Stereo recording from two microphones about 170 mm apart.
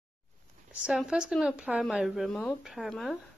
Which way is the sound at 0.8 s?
5° right (ahead or behind).